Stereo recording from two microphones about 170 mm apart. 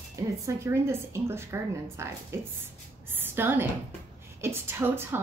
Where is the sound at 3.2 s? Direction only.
10° right (ahead or behind).